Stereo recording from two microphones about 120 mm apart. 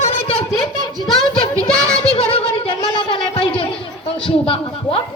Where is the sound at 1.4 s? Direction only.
55° left (ahead or behind).